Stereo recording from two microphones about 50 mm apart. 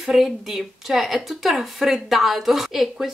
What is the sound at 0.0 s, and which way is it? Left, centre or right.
Speech, centre.